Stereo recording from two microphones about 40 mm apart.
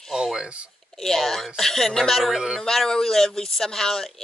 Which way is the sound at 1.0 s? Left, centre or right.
Centre.